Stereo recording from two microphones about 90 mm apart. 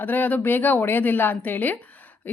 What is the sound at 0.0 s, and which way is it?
Speech, 20° left (ahead or behind).